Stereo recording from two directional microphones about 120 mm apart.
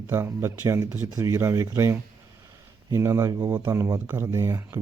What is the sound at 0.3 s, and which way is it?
Speech, 25° right (ahead or behind).